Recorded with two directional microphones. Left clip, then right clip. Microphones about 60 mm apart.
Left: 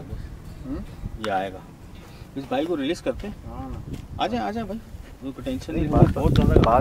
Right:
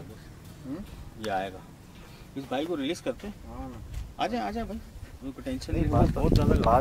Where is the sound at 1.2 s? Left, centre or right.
Centre.